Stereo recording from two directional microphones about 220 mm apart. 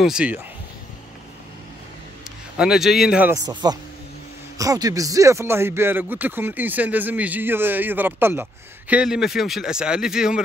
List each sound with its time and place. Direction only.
0.0 s a man's voice: 5° right (ahead or behind)
2.5 s a man's voice: 5° right (ahead or behind)
3.6 s speech: 20° right (ahead or behind); by 10.4 s 5° right (ahead or behind)